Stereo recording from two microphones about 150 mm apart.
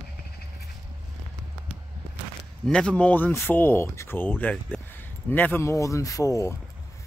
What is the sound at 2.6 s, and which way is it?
Speech, 5° left (ahead or behind).